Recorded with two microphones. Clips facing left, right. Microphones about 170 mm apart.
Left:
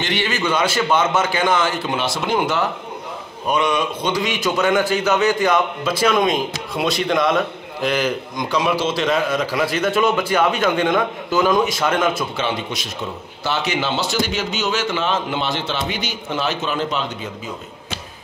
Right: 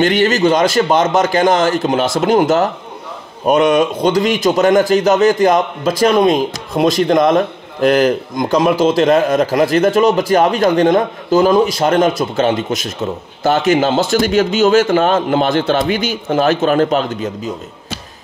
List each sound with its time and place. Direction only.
0.0 s a man's voice: 45° right (ahead or behind)